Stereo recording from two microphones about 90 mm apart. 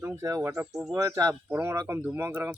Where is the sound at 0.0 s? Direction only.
35° right (ahead or behind).